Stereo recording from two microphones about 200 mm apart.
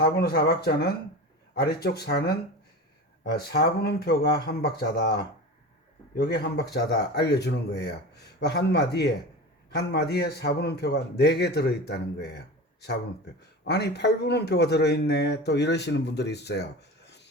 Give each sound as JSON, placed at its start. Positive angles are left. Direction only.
{"t": 0.0, "sound": "a man's voice", "side_deg": 50}
{"t": 13.7, "sound": "a man's voice", "side_deg": 60}